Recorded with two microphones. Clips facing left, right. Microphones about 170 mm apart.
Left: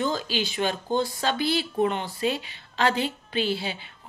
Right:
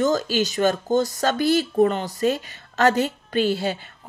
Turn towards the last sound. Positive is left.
turn(degrees=-45)  # may be behind; listen again after turning